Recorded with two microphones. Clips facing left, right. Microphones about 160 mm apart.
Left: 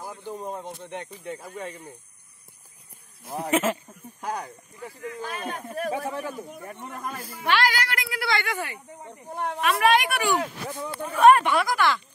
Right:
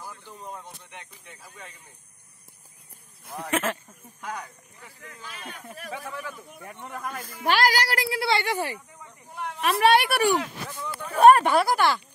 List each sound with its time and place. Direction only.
0.0 s a sound: 20° left (ahead or behind)
0.9 s speech: 45° left (ahead or behind)
3.4 s speech: 10° left (ahead or behind)
4.2 s speech: 35° left (ahead or behind)
7.4 s speech: 40° right (ahead or behind)
9.1 s speech: 50° left (ahead or behind)
9.6 s speech: 35° right (ahead or behind)
10.4 s speech: 30° left (ahead or behind)
11.1 s speech: 40° right (ahead or behind)